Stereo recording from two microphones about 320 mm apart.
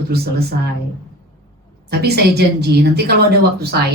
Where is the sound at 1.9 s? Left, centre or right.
Right.